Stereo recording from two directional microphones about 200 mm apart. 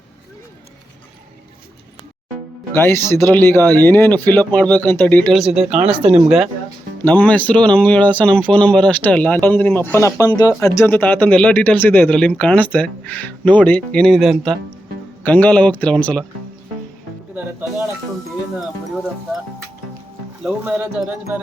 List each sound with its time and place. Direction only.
2.7 s speech: 10° left (ahead or behind)
7.0 s speech: 10° left (ahead or behind)
17.3 s speech: 10° right (ahead or behind)
20.4 s speech: 5° right (ahead or behind)